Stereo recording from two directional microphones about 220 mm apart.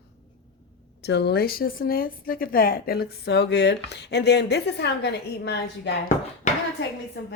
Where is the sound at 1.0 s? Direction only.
50° left (ahead or behind).